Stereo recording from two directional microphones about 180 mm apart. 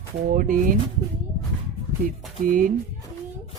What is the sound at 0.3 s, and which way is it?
Speech, 45° right (ahead or behind).